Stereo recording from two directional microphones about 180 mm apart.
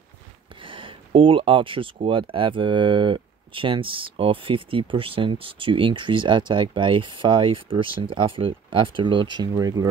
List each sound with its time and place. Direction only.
0.6 s speech: 30° right (ahead or behind)